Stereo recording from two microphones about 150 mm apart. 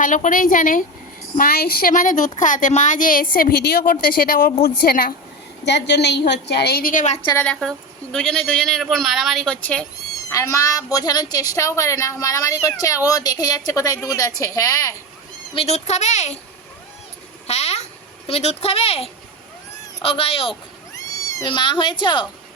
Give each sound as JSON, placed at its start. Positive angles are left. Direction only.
{"t": 0.0, "sound": "a woman's voice", "side_deg": 60}
{"t": 1.4, "sound": "a woman's voice", "side_deg": 90}
{"t": 6.5, "sound": "a woman's voice", "side_deg": 90}
{"t": 7.3, "sound": "a woman's voice", "side_deg": 10}
{"t": 15.5, "sound": "speech", "side_deg": 45}
{"t": 17.4, "sound": "a sound", "side_deg": 45}
{"t": 18.3, "sound": "speech", "side_deg": 40}
{"t": 20.9, "sound": "cat", "side_deg": 20}
{"t": 21.5, "sound": "speech", "side_deg": 30}